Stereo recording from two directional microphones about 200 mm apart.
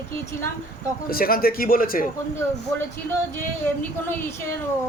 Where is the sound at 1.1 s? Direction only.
50° left (ahead or behind).